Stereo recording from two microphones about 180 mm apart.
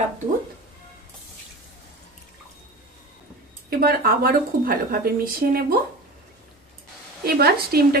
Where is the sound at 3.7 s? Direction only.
55° right (ahead or behind).